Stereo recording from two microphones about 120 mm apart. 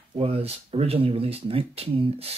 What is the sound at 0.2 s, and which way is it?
Speech, 55° right (ahead or behind).